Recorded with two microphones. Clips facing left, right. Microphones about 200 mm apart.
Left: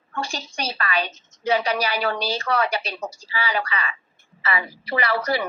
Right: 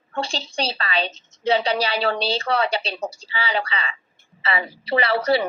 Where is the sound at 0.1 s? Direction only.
30° right (ahead or behind).